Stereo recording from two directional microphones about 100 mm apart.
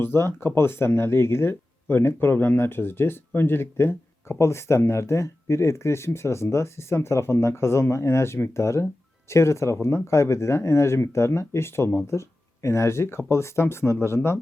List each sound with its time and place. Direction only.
0.0 s speech: 25° left (ahead or behind)